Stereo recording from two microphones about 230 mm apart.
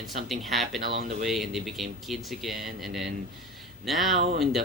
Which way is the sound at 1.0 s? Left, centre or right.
Right.